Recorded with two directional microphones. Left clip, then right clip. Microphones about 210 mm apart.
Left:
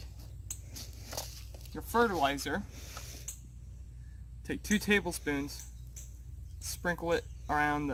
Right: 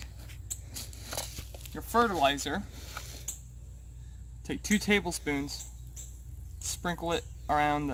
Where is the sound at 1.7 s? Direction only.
20° right (ahead or behind).